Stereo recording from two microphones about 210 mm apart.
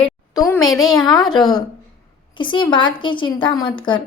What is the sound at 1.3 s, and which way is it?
A woman's voice, 20° left (ahead or behind).